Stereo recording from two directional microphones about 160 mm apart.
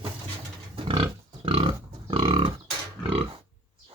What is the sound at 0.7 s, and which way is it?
Pig, 35° right (ahead or behind).